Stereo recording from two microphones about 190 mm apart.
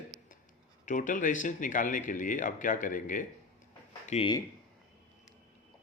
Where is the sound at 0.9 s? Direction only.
45° left (ahead or behind).